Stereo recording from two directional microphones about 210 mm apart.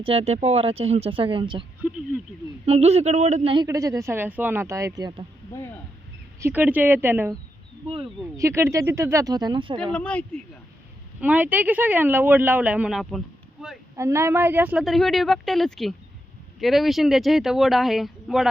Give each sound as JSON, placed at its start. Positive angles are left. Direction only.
{"t": 0.0, "sound": "speech", "side_deg": -30}
{"t": 2.6, "sound": "speech", "side_deg": -30}
{"t": 5.5, "sound": "speech", "side_deg": 10}
{"t": 6.4, "sound": "speech", "side_deg": -10}
{"t": 8.4, "sound": "speech", "side_deg": -15}
{"t": 9.9, "sound": "speech", "side_deg": 5}
{"t": 11.2, "sound": "speech", "side_deg": -10}
{"t": 13.9, "sound": "a woman's voice", "side_deg": -15}